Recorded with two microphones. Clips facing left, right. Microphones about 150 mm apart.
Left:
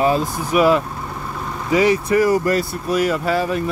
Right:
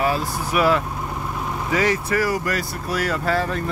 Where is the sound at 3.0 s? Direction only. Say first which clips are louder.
Left 2 dB; 15° left (ahead or behind).